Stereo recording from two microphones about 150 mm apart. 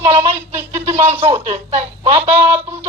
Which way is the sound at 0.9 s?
45° right (ahead or behind).